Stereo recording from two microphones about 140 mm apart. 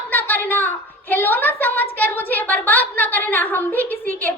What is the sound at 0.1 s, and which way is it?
A child's voice, 15° left (ahead or behind).